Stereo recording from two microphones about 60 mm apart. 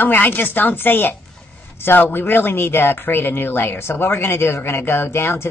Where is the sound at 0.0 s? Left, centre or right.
Left.